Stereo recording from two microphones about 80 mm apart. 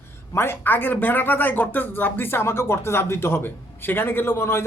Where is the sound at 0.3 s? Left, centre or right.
Left.